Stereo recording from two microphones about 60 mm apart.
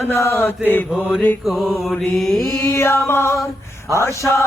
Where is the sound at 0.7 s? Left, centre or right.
Left.